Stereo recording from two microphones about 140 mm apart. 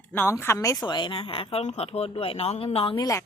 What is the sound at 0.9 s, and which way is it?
Speech, 35° left (ahead or behind).